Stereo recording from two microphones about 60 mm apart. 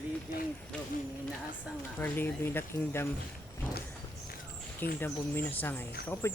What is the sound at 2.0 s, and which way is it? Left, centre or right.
Speech, left.